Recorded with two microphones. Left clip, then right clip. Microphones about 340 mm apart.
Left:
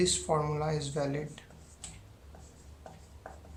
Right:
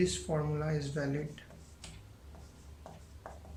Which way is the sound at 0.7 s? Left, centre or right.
Centre.